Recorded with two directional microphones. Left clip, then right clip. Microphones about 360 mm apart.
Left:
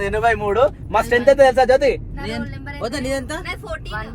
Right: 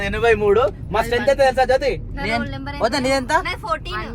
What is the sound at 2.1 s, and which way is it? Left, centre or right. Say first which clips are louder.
Speech: right 6 dB; centre.